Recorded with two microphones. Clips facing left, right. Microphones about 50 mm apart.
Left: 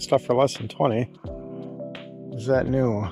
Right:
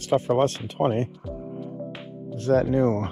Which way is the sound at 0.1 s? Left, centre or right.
Left.